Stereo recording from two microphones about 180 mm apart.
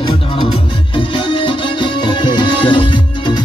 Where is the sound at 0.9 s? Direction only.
25° left (ahead or behind).